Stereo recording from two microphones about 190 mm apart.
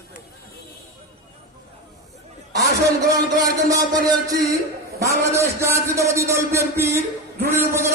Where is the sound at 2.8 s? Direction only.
20° right (ahead or behind).